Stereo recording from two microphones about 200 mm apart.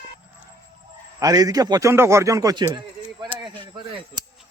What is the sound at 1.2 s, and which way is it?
A man's voice, 20° right (ahead or behind).